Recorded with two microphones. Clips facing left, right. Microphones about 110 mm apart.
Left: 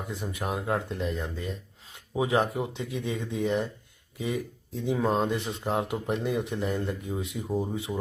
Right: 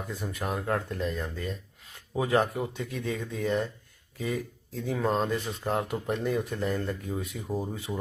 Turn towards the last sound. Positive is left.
turn(degrees=20)  # may be behind; listen again after turning